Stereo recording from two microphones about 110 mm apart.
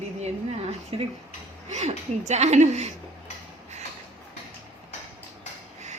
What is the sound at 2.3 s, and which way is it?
Speech, 90° right.